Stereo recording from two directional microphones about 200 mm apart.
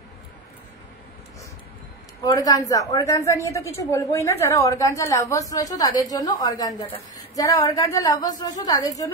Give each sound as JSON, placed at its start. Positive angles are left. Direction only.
{"t": 2.2, "sound": "a woman's voice", "side_deg": 15}